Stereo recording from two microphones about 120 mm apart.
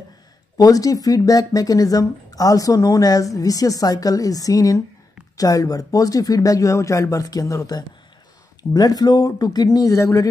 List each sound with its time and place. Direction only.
0.6 s speech: 30° left (ahead or behind)